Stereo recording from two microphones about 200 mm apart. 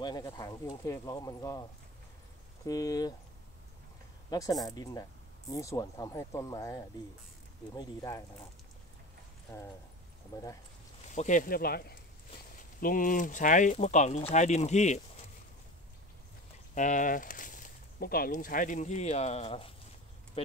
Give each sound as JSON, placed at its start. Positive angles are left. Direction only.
{"t": 0.0, "sound": "speech", "side_deg": 20}
{"t": 4.3, "sound": "speech", "side_deg": 20}
{"t": 10.3, "sound": "speech", "side_deg": 15}
{"t": 11.1, "sound": "speech", "side_deg": 40}
{"t": 16.7, "sound": "speech", "side_deg": 40}